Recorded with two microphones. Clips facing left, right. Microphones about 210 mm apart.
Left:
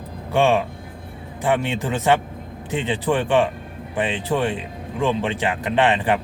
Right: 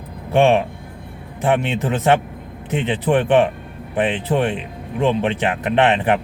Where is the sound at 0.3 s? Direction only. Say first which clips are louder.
Right 3 dB; 20° right (ahead or behind).